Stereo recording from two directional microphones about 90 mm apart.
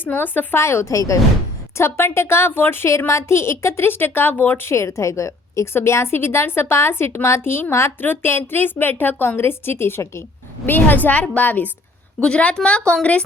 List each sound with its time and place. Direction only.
0.0 s a woman's voice: 20° left (ahead or behind)